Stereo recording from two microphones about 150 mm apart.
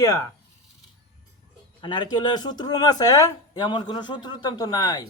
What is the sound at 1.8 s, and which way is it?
Speech, 30° left (ahead or behind).